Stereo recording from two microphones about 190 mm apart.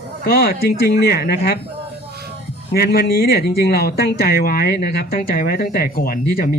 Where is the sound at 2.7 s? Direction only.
55° left (ahead or behind).